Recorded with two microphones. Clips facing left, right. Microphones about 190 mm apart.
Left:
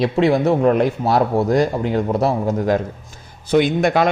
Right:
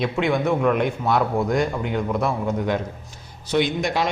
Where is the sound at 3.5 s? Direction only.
55° left (ahead or behind).